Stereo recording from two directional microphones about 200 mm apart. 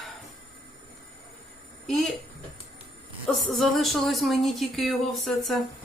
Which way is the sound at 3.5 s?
Centre (ahead or behind).